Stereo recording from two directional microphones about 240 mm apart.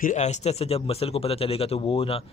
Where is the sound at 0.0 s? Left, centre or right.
Left.